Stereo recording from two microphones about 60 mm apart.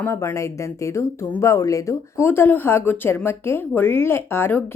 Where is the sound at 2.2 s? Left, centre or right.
Left.